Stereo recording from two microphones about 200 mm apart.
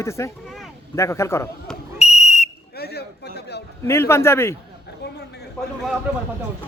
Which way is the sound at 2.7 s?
55° left (ahead or behind).